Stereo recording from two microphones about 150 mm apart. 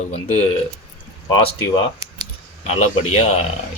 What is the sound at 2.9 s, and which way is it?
Speech, 45° left (ahead or behind).